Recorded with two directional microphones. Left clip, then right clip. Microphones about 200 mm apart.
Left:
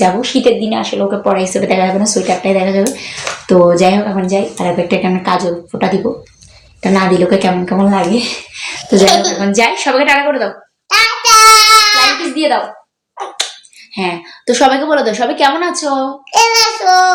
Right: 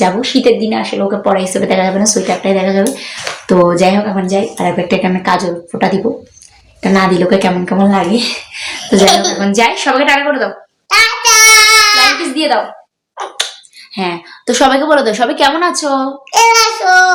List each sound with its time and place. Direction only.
0.0 s speech: 20° right (ahead or behind)
8.5 s a sound: 15° right (ahead or behind)
13.1 s finger snapping: 15° right (ahead or behind)
13.9 s a woman's voice: 20° right (ahead or behind)